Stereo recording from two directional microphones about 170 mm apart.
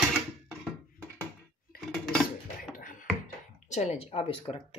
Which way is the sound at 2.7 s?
55° left (ahead or behind).